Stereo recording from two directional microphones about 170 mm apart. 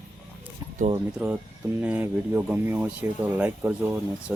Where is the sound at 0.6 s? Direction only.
25° right (ahead or behind).